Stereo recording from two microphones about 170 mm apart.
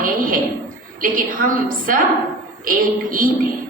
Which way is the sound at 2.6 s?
55° right (ahead or behind).